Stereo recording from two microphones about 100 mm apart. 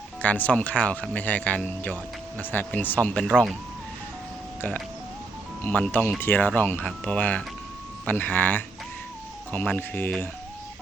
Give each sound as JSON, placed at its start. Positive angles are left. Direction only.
{"t": 0.2, "sound": "speech", "side_deg": 15}
{"t": 5.6, "sound": "speech", "side_deg": 15}